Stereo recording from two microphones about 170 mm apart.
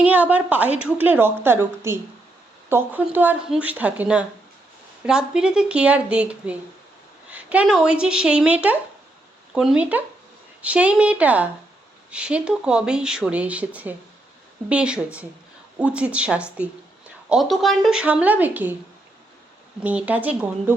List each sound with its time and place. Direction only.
0.0 s a woman's voice: 10° right (ahead or behind)
19.8 s a woman's voice: 10° right (ahead or behind)